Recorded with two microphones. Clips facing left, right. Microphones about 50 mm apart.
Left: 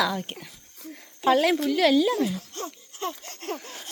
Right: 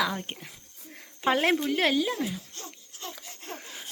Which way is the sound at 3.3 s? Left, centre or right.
Left.